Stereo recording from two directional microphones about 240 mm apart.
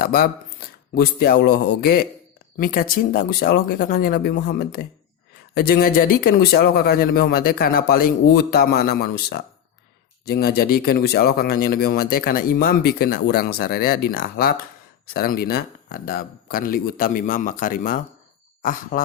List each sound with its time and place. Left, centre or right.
0.0 s speech: left